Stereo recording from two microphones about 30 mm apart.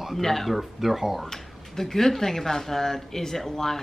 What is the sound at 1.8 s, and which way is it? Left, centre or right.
Speech, centre.